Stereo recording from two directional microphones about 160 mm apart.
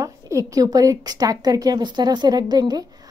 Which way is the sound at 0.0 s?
20° right (ahead or behind).